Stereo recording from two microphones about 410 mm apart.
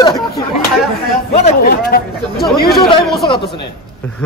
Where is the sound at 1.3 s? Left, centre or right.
Centre.